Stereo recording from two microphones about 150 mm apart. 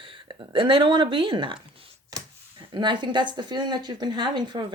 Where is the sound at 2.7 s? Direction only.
30° right (ahead or behind).